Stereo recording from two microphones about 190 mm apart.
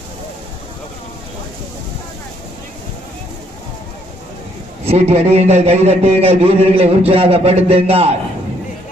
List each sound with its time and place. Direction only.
4.9 s a man's voice: 35° right (ahead or behind)